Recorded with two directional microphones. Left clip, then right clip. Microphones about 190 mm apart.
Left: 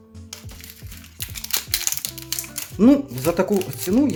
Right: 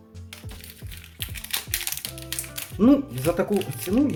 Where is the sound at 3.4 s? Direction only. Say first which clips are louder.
Left 4 dB; 20° left (ahead or behind).